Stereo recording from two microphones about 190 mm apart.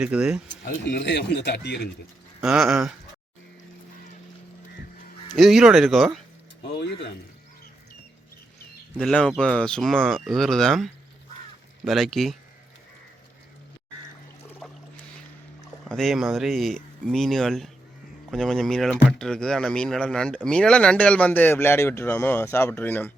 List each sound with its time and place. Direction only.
0.0 s speech: 5° right (ahead or behind)
0.4 s speech: 70° left (ahead or behind)
2.4 s speech: 5° right (ahead or behind)
5.4 s speech: centre (ahead or behind)
6.6 s a sound: 65° left (ahead or behind)
9.0 s speech: 5° left (ahead or behind)
14.6 s a sound: centre (ahead or behind)
15.9 s speech: centre (ahead or behind)